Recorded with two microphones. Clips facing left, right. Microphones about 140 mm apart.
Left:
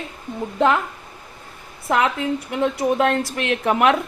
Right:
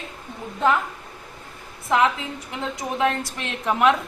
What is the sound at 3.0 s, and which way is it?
Speech, 65° left (ahead or behind).